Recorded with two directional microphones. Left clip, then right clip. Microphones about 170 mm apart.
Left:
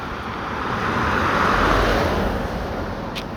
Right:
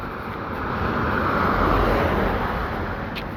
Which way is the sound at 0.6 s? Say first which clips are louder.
Left 3 dB; 5° right (ahead or behind).